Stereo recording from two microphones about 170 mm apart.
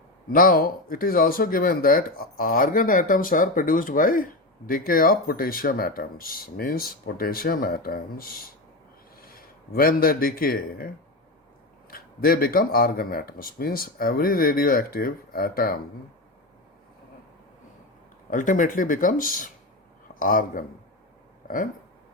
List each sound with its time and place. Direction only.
0.3 s a man's voice: 60° left (ahead or behind)
18.3 s speech: 50° left (ahead or behind)